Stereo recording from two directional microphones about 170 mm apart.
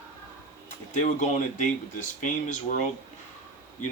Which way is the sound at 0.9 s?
45° left (ahead or behind).